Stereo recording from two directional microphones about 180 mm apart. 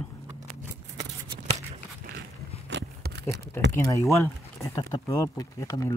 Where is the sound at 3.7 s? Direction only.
15° left (ahead or behind).